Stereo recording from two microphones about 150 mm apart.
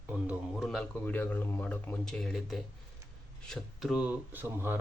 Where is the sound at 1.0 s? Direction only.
15° left (ahead or behind).